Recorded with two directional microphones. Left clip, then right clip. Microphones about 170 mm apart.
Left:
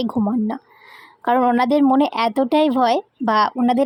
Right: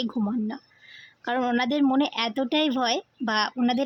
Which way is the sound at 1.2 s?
25° left (ahead or behind).